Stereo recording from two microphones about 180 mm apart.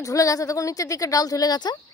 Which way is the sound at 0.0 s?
20° left (ahead or behind).